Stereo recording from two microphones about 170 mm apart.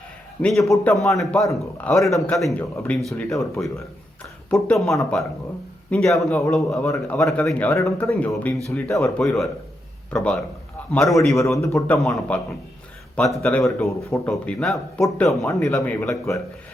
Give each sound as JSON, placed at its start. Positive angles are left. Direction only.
{"t": 0.4, "sound": "a man's voice", "side_deg": 0}
{"t": 11.3, "sound": "speech", "side_deg": 15}
{"t": 11.9, "sound": "a man's voice", "side_deg": 0}
{"t": 15.7, "sound": "speech", "side_deg": 10}